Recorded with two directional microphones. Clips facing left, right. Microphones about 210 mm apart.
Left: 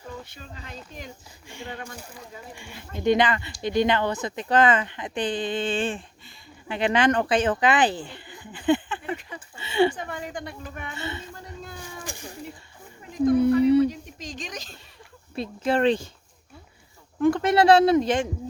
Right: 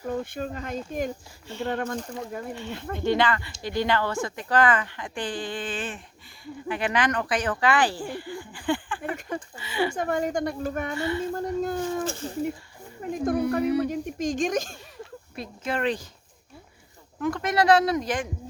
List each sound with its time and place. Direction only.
0.0 s speech: 55° right (ahead or behind)
3.0 s speech: 20° left (ahead or behind)
9.9 s speech: 45° right (ahead or behind)
10.9 s speech: 25° left (ahead or behind)
11.3 s a sound: 50° right (ahead or behind)
12.0 s a sound: 15° left (ahead or behind)
13.0 s a sound: 50° right (ahead or behind)
13.8 s speech: 50° right (ahead or behind)
15.4 s speech: 30° left (ahead or behind)
17.2 s speech: 30° left (ahead or behind)